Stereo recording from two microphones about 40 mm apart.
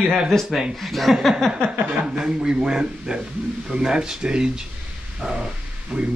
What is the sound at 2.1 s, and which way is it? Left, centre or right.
Speech, centre.